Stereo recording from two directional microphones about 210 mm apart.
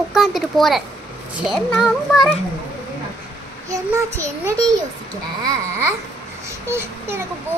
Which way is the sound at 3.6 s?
15° right (ahead or behind).